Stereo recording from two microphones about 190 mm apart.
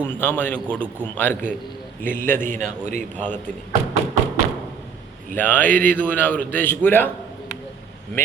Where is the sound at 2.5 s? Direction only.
40° right (ahead or behind).